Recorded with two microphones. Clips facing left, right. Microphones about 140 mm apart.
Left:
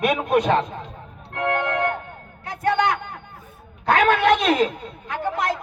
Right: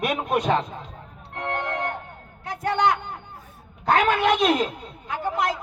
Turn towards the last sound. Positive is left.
turn(degrees=65)  # may be behind; listen again after turning